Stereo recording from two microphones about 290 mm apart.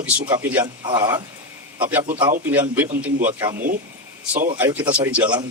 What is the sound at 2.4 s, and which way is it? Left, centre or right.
Speech, centre.